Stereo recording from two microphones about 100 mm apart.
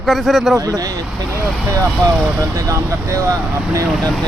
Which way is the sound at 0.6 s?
35° right (ahead or behind).